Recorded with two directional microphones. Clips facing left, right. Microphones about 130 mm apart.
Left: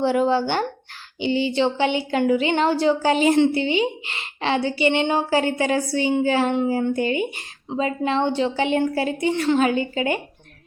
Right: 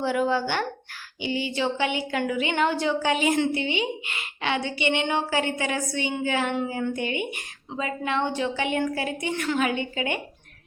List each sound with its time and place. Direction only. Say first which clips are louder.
0.0 s a woman's voice: left 5 dB; 30° left (ahead or behind)